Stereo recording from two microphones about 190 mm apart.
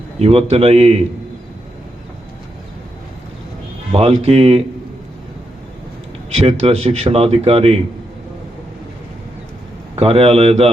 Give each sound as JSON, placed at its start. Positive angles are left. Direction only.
{"t": 0.2, "sound": "speech", "side_deg": -30}
{"t": 3.9, "sound": "speech", "side_deg": -30}
{"t": 6.4, "sound": "speech", "side_deg": -30}
{"t": 9.9, "sound": "speech", "side_deg": -30}